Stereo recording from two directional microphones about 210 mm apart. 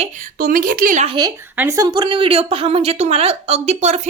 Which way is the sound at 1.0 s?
20° right (ahead or behind).